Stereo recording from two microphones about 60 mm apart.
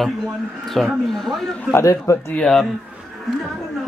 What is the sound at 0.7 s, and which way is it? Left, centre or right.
Speech, centre.